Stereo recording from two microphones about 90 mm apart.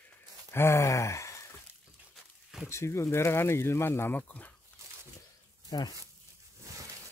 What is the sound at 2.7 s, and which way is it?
Speech, 30° left (ahead or behind).